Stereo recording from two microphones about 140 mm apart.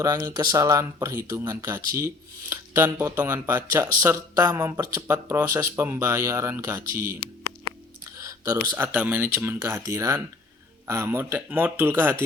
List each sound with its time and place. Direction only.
0.0 s speech: 25° right (ahead or behind)
8.2 s a sound: 20° right (ahead or behind)
8.7 s speech: 15° right (ahead or behind)